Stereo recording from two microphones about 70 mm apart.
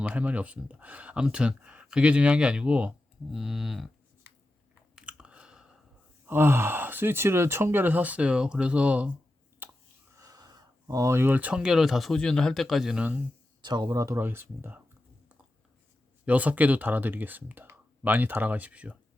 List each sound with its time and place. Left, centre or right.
0.0 s speech: centre
3.3 s speech: centre
4.9 s chewing: centre
6.2 s speech: right; by 9.0 s centre
9.6 s a sound: right
10.1 s a sound: right
11.2 s speech: right
11.5 s speech: centre
13.0 s speech: right
13.6 s speech: right
13.9 s speech: right
14.2 s speech: right
16.2 s speech: right